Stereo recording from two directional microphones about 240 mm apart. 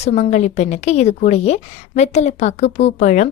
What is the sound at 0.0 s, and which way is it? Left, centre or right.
A woman's voice, left.